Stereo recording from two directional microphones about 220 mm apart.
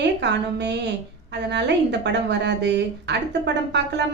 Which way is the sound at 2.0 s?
50° right (ahead or behind).